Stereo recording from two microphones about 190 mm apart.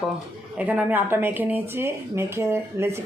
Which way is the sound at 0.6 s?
10° right (ahead or behind).